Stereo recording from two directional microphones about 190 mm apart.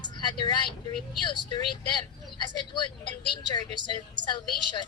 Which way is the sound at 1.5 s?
25° left (ahead or behind).